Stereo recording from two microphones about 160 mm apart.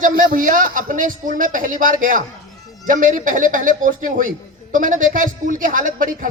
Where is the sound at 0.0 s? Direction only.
60° right (ahead or behind).